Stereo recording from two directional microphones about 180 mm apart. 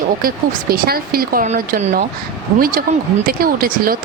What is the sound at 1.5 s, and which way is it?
Speech, 40° right (ahead or behind).